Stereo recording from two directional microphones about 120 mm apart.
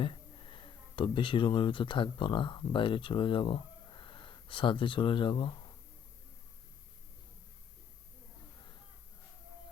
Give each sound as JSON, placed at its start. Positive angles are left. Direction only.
{"t": 0.0, "sound": "speech", "side_deg": 45}